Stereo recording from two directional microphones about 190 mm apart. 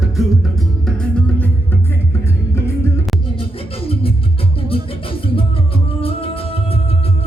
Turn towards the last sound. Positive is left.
turn(degrees=30)  # may be behind; listen again after turning